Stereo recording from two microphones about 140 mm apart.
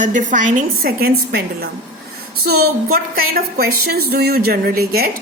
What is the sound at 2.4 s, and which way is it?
A woman's voice, 90° right.